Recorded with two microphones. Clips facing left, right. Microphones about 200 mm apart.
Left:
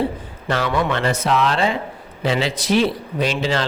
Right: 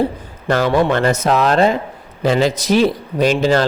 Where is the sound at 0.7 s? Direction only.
35° right (ahead or behind).